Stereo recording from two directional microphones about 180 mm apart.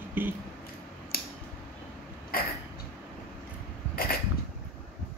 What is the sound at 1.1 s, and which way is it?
Scissors, 55° left (ahead or behind).